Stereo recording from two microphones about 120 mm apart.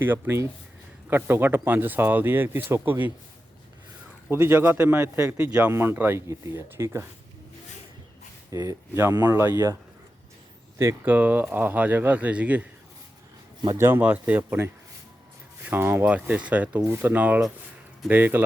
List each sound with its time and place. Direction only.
0.0 s speech: 15° right (ahead or behind)
4.3 s speech: 15° right (ahead or behind)
5.4 s speech: 10° right (ahead or behind)
8.5 s speech: 25° right (ahead or behind)
10.8 s speech: 20° right (ahead or behind)
13.7 s speech: 20° right (ahead or behind)